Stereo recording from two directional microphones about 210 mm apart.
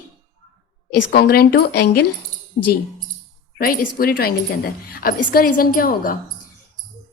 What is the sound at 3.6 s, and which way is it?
A woman's voice, 45° left (ahead or behind).